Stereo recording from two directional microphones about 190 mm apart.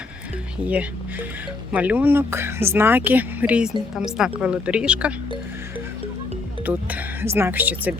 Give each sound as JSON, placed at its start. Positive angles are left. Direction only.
{"t": 1.7, "sound": "speech", "side_deg": -10}
{"t": 6.7, "sound": "speech", "side_deg": -10}